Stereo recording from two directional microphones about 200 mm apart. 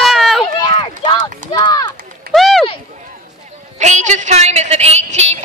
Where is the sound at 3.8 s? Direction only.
35° right (ahead or behind).